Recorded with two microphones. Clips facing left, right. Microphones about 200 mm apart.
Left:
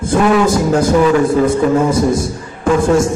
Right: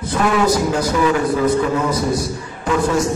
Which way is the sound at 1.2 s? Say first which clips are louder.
Left 4 dB; 25° left (ahead or behind).